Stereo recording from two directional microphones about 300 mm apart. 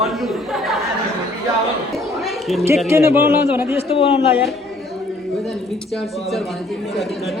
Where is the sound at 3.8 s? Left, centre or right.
Centre.